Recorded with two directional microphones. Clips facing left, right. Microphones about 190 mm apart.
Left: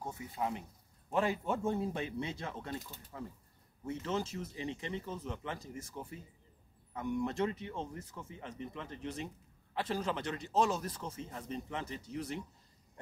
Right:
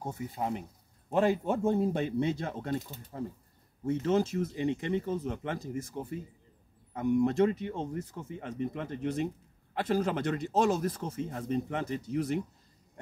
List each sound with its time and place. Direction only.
0.1 s speech: 35° right (ahead or behind)